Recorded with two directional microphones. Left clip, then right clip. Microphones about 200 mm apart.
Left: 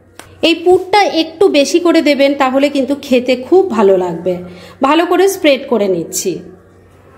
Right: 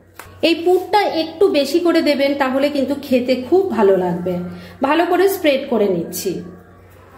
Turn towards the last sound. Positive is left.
turn(degrees=40)  # may be behind; listen again after turning